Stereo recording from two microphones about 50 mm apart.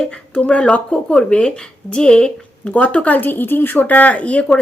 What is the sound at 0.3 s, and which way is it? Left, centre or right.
A woman's voice, left.